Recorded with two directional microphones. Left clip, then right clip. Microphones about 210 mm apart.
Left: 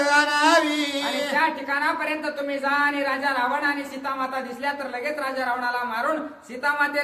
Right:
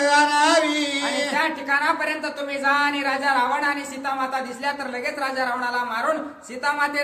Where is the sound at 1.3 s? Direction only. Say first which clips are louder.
Even; 10° right (ahead or behind).